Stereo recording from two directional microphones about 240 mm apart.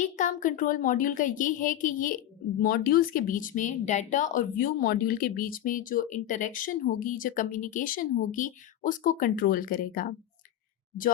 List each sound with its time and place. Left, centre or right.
0.0 s speech: left